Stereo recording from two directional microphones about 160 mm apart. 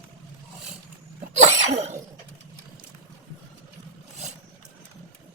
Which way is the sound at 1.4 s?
45° right (ahead or behind).